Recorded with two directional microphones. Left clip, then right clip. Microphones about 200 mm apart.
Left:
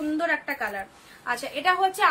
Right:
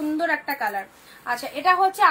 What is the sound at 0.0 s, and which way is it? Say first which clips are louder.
A woman's voice: right 2 dB; 15° left (ahead or behind).